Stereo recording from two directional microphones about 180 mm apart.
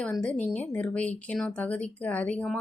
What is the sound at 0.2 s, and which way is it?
Speech, 5° left (ahead or behind).